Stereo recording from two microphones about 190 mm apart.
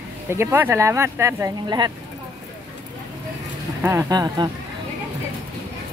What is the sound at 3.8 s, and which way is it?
Speech, 15° right (ahead or behind).